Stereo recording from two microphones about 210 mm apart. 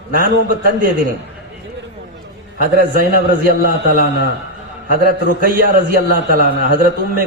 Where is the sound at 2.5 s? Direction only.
45° right (ahead or behind).